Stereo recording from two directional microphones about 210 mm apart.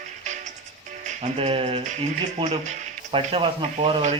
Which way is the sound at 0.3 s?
35° right (ahead or behind).